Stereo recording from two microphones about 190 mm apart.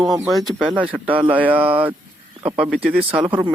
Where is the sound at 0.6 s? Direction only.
5° right (ahead or behind).